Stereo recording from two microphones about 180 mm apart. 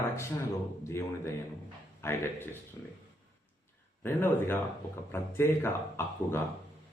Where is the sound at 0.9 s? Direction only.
15° left (ahead or behind).